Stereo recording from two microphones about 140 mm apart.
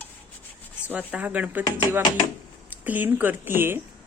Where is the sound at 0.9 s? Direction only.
10° right (ahead or behind).